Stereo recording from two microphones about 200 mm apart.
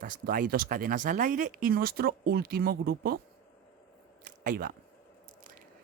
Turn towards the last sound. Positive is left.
turn(degrees=-45)  # may be behind; listen again after turning